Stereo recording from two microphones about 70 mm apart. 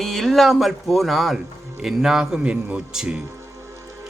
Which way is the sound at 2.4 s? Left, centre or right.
Centre.